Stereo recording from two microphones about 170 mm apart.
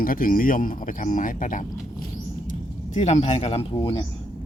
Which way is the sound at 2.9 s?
40° left (ahead or behind).